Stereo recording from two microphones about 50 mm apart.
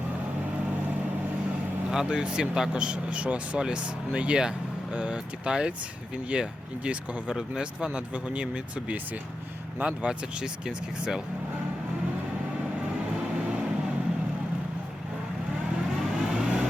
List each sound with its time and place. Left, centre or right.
1.9 s speech: centre
16.0 s vehicle: centre